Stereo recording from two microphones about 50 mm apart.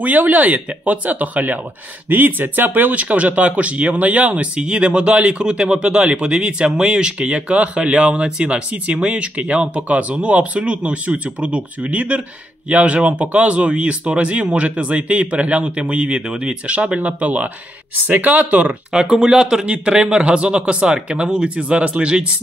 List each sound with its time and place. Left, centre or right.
0.0 s speech: right
18.7 s speech: right